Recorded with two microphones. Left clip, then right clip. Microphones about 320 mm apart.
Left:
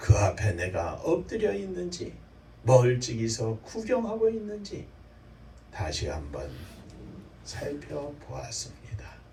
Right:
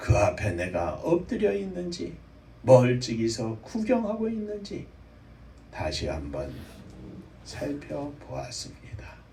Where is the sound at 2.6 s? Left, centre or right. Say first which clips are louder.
Right 3 dB; right.